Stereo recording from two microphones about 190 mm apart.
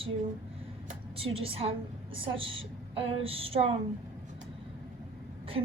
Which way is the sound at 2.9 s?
30° right (ahead or behind).